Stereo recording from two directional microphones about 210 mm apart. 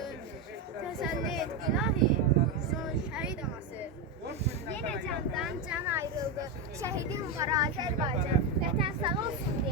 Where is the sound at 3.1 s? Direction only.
5° right (ahead or behind).